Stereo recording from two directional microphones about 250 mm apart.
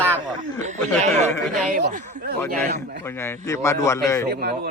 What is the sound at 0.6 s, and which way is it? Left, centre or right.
A man's voice, right.